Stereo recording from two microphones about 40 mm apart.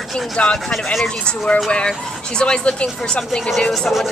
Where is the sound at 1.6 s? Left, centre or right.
Left.